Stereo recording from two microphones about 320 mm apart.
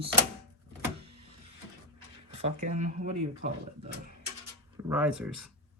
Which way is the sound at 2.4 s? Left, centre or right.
Right.